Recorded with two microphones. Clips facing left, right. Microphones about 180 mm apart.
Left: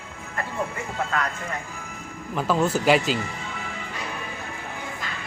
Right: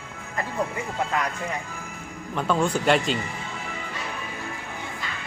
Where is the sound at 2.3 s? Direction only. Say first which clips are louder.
Left 1 dB; 5° left (ahead or behind).